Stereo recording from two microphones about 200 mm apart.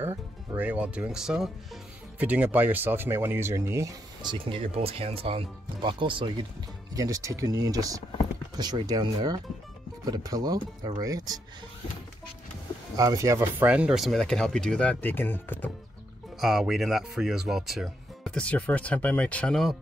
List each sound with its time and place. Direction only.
0.0 s speech: 10° right (ahead or behind)
12.9 s speech: 15° right (ahead or behind); by 15.7 s 10° left (ahead or behind)
16.3 s speech: centre (ahead or behind)